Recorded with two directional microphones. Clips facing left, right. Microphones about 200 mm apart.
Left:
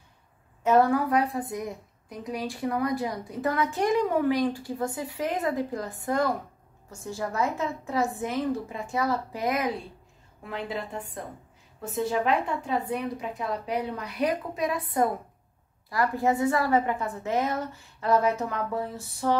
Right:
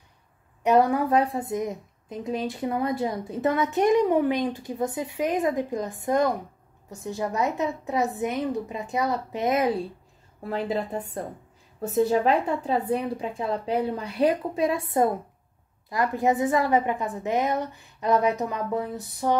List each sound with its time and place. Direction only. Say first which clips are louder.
0.7 s a woman's voice: right 1 dB; 20° right (ahead or behind)